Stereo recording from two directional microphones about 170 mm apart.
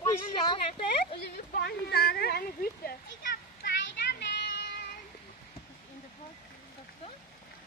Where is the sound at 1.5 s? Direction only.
65° left (ahead or behind).